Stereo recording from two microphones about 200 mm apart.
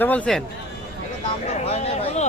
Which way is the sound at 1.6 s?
30° left (ahead or behind).